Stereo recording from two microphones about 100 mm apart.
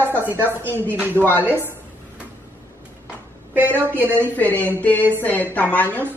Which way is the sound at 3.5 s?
20° right (ahead or behind).